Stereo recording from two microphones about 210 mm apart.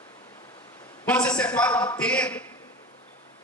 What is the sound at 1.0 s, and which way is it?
A man's voice, 5° left (ahead or behind).